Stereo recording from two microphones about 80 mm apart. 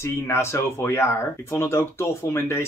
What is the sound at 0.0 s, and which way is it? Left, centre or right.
Speech, left.